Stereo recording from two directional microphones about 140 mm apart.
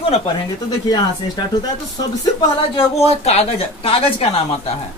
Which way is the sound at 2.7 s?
45° left (ahead or behind).